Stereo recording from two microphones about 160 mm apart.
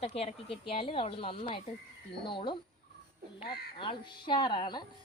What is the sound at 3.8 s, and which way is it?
A woman's voice, 30° left (ahead or behind).